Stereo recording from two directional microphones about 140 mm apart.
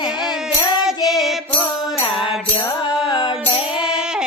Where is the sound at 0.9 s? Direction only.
Centre (ahead or behind).